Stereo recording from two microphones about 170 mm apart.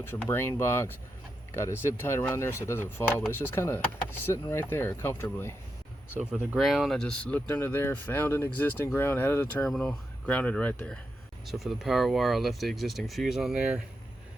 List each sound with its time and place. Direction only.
0.0 s speech: 15° left (ahead or behind)
6.1 s speech: 5° right (ahead or behind); by 10.9 s 10° left (ahead or behind)
11.4 s speech: centre (ahead or behind)